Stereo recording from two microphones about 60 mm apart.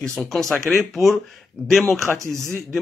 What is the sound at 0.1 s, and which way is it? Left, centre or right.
A man's voice, centre.